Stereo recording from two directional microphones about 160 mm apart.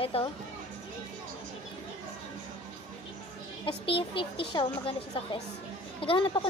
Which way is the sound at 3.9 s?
35° left (ahead or behind).